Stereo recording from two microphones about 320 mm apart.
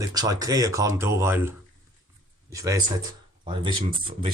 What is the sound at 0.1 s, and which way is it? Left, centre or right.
Speech, centre.